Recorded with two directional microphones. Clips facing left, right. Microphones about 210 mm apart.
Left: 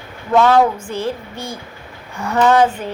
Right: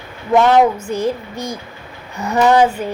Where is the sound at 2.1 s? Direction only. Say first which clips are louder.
Right 1 dB; 10° right (ahead or behind).